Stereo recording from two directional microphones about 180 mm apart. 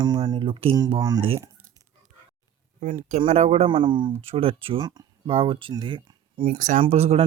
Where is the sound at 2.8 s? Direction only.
45° right (ahead or behind); by 6.5 s 30° right (ahead or behind).